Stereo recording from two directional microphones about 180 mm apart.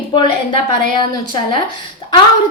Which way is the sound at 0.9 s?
25° left (ahead or behind).